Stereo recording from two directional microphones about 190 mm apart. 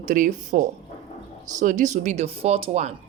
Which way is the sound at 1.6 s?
40° right (ahead or behind).